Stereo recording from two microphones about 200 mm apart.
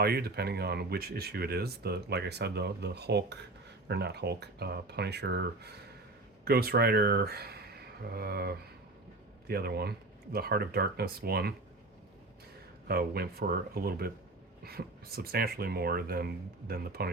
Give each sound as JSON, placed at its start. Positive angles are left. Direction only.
{"t": 0.0, "sound": "speech", "side_deg": -50}
{"t": 12.9, "sound": "speech", "side_deg": -50}